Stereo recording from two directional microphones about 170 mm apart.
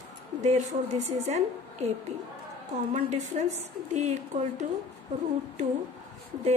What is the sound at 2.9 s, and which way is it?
A woman's voice, 45° right (ahead or behind).